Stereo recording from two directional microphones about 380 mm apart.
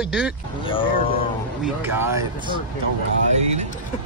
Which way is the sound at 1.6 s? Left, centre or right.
Centre.